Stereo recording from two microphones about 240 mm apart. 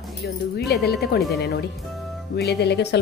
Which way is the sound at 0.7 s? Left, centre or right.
Left.